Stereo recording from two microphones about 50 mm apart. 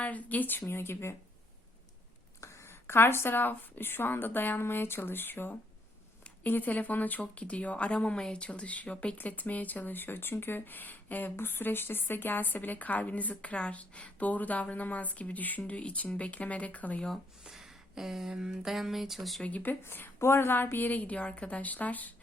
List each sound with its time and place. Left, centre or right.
0.0 s speech: left
0.7 s speech: left
2.4 s a sound: left
2.6 s a woman's voice: left
6.5 s speech: left
17.4 s speech: centre
19.4 s speech: left
19.6 s a woman's voice: left
20.1 s speech: left